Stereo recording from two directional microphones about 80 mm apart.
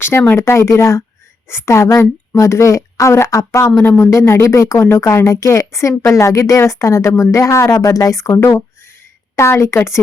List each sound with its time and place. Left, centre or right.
0.3 s speech: left